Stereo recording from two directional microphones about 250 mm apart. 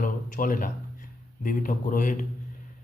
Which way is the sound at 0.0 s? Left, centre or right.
Left.